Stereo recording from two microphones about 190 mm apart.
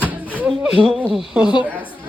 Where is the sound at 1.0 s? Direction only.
5° right (ahead or behind).